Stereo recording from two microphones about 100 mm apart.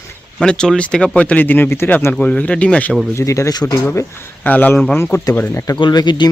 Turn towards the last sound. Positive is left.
turn(degrees=45)  # may be behind; listen again after turning